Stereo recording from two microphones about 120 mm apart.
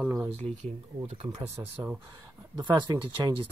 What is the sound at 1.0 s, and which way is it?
Speech, 60° right (ahead or behind).